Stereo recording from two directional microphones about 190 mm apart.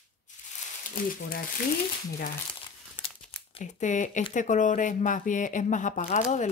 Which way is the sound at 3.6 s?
40° left (ahead or behind).